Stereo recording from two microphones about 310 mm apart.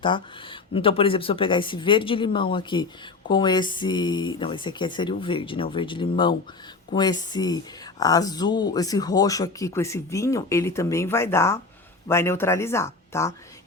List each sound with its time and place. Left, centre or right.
0.0 s speech: centre